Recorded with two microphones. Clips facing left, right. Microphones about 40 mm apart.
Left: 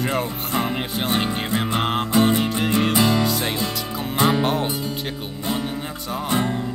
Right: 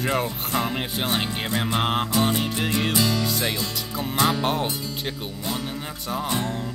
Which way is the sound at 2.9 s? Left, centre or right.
Left.